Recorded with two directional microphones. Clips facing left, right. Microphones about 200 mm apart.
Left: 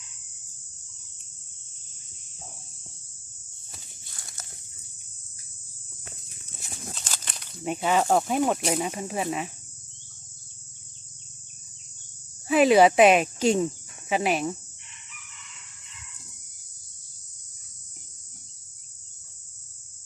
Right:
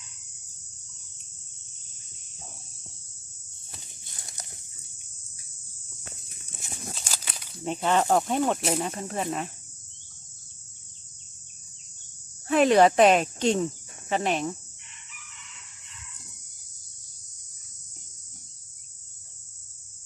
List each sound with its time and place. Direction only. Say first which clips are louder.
4.2 s dog: right 2 dB; 20° right (ahead or behind)
6.6 s a sound: right 1 dB; 5° right (ahead or behind)
7.6 s speech: even; 10° left (ahead or behind)
12.5 s speech: left 1 dB; 5° left (ahead or behind)